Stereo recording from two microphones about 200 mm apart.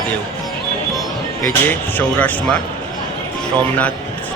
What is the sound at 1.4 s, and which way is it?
Speech, 10° left (ahead or behind).